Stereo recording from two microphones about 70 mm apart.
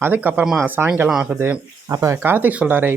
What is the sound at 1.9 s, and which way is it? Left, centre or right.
Speech, right.